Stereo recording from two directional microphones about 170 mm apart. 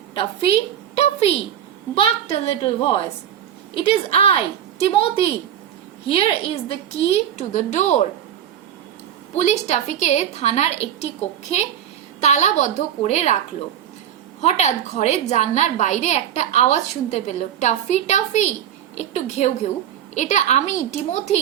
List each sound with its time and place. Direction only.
0.1 s a woman's voice: 30° left (ahead or behind)
0.9 s a sound: 35° left (ahead or behind)
2.0 s a woman's voice: 35° left (ahead or behind)
9.3 s a woman's voice: 40° left (ahead or behind)
14.4 s a woman's voice: 40° left (ahead or behind)